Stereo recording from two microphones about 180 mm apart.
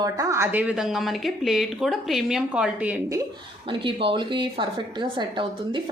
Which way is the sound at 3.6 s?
30° right (ahead or behind).